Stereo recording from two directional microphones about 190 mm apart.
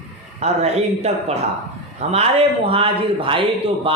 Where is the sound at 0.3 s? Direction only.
35° right (ahead or behind).